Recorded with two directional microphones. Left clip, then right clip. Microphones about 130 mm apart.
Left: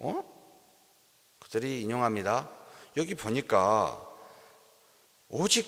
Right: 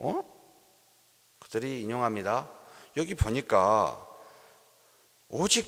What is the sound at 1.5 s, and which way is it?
A man's voice, 35° right (ahead or behind).